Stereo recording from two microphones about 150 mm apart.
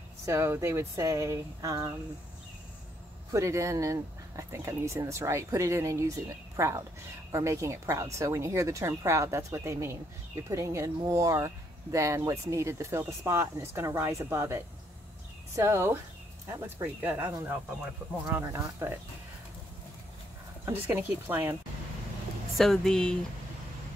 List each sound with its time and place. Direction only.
0.2 s speech: 20° right (ahead or behind)
3.3 s speech: 20° right (ahead or behind)
20.6 s speech: 15° right (ahead or behind)
22.6 s speech: centre (ahead or behind)